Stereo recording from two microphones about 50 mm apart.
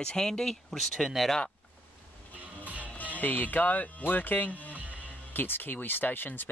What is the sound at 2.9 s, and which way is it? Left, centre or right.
Speech, left.